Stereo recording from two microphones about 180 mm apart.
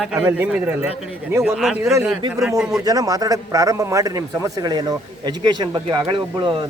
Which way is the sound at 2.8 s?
20° right (ahead or behind).